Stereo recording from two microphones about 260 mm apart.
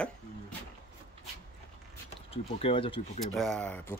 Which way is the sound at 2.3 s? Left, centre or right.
Left.